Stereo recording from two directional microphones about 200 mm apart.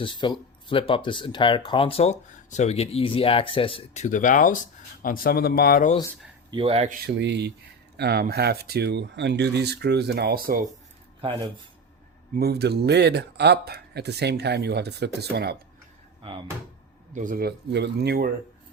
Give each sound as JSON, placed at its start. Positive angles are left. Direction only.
{"t": 0.0, "sound": "speech", "side_deg": 25}
{"t": 6.5, "sound": "speech", "side_deg": -25}
{"t": 7.0, "sound": "speech", "side_deg": -60}
{"t": 12.3, "sound": "speech", "side_deg": -55}
{"t": 16.2, "sound": "speech", "side_deg": -25}
{"t": 17.2, "sound": "speech", "side_deg": -45}